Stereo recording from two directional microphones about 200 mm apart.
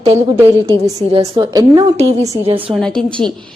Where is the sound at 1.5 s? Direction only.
15° right (ahead or behind).